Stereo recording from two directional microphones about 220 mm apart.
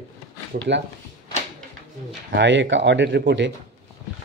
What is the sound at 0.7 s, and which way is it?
Speech, 55° right (ahead or behind).